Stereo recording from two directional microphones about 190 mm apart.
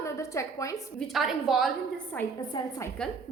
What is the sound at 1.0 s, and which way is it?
Speech, centre (ahead or behind).